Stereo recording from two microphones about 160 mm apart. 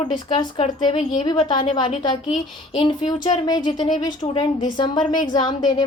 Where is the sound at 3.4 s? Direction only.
25° left (ahead or behind).